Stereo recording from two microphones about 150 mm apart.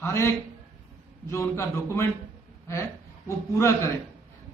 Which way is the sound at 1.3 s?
20° left (ahead or behind).